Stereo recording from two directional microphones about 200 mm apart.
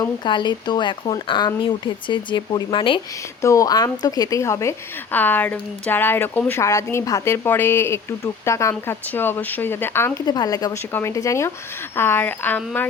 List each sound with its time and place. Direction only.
0.0 s speech: 20° left (ahead or behind)